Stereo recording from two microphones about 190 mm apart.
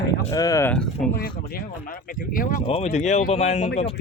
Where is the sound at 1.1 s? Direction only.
50° left (ahead or behind).